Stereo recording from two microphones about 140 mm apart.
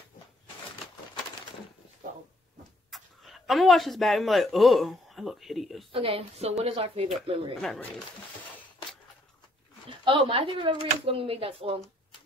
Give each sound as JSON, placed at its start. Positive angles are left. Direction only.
{"t": 2.9, "sound": "speech", "side_deg": 0}
{"t": 5.9, "sound": "a woman's voice", "side_deg": -40}
{"t": 9.8, "sound": "speech", "side_deg": -35}